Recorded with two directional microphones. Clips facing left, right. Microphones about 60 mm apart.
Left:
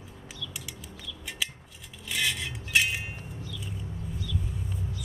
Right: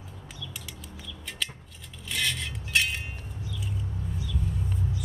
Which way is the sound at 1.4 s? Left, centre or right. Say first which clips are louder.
Even; centre.